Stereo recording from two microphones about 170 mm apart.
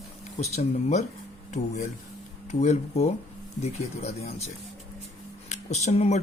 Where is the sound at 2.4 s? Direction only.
40° left (ahead or behind).